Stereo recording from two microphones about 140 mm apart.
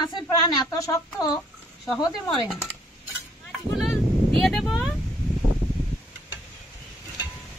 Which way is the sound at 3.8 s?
Centre (ahead or behind).